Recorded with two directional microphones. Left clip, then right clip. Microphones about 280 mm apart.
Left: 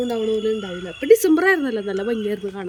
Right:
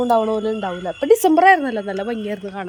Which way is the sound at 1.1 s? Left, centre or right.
Centre.